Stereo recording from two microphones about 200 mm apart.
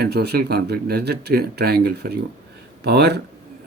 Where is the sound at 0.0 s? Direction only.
55° right (ahead or behind).